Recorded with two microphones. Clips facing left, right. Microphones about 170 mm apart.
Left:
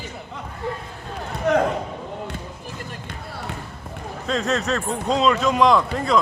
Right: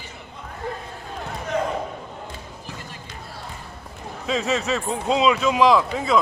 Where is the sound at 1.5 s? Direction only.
65° left (ahead or behind).